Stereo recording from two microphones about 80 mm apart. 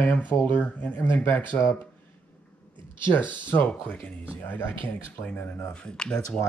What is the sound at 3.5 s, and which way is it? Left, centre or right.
Speech, centre.